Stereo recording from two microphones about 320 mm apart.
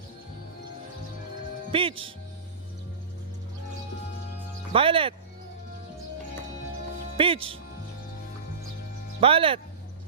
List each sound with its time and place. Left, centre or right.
1.7 s speech: centre
4.7 s speech: centre
7.2 s speech: centre
9.2 s speech: centre